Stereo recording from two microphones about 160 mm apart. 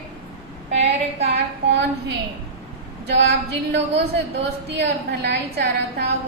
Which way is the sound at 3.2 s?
90° right.